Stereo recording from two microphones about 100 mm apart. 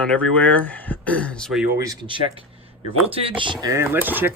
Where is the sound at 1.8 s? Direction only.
40° right (ahead or behind).